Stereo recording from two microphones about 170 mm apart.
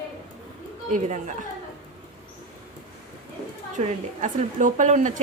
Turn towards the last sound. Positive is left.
turn(degrees=-50)  # may be behind; listen again after turning